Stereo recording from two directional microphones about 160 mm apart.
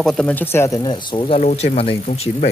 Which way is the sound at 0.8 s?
30° left (ahead or behind).